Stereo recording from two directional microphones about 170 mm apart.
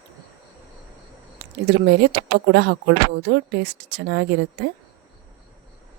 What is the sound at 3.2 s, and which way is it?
Speech, 85° right.